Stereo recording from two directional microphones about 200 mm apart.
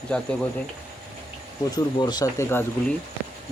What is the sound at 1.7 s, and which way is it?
Speech, 20° left (ahead or behind).